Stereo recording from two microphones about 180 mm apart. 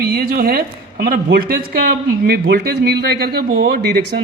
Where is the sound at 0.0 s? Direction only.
55° right (ahead or behind).